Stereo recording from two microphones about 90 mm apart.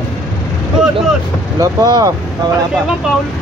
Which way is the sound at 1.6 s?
45° right (ahead or behind).